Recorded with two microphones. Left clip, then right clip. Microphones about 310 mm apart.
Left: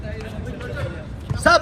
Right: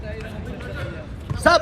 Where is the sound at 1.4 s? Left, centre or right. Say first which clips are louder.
Left 1 dB; right.